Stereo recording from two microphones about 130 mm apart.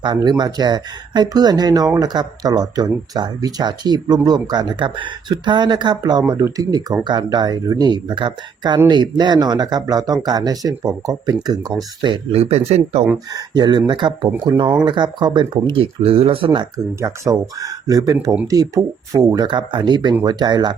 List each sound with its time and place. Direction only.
0.0 s speech: 35° right (ahead or behind)
12.4 s speech: 55° right (ahead or behind)
13.3 s speech: 30° right (ahead or behind)
17.0 s speech: 25° right (ahead or behind)